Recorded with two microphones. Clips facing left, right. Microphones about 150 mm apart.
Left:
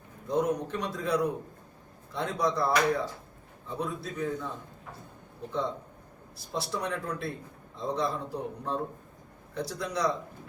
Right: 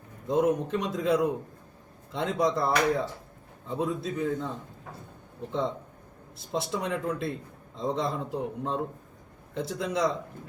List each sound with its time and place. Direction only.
0.3 s a man's voice: 20° right (ahead or behind)
5.5 s a man's voice: 20° right (ahead or behind)